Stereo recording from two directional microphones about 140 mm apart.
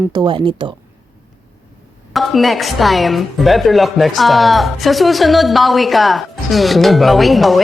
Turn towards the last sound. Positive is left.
turn(degrees=0)  # may be behind; listen again after turning